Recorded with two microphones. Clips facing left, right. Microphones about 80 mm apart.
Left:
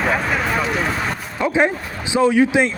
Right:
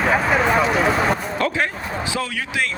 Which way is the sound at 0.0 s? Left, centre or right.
Centre.